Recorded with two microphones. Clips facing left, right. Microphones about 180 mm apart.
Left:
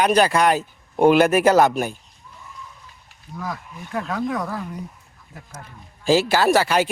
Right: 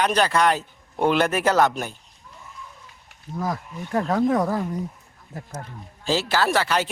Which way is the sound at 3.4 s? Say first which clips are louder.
Right 3 dB; 35° right (ahead or behind).